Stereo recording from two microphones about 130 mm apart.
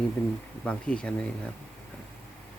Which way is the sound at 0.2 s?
15° left (ahead or behind).